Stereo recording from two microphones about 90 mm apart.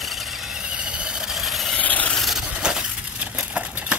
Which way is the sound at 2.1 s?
Centre (ahead or behind).